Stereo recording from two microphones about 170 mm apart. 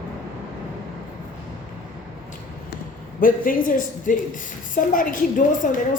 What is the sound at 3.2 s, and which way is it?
A woman's voice, 55° left (ahead or behind).